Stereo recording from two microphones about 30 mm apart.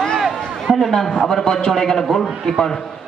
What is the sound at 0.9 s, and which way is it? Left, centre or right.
A man's voice, centre.